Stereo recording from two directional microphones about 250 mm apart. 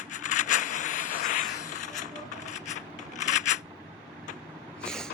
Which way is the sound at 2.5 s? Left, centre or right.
Left.